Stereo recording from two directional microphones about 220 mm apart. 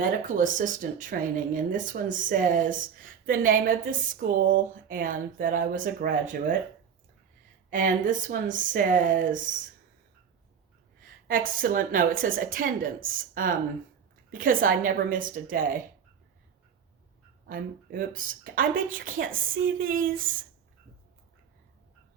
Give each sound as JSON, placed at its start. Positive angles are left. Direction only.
{"t": 0.0, "sound": "a woman's voice", "side_deg": -35}
{"t": 7.7, "sound": "a woman's voice", "side_deg": -35}
{"t": 11.3, "sound": "a woman's voice", "side_deg": -40}
{"t": 17.4, "sound": "a woman's voice", "side_deg": -40}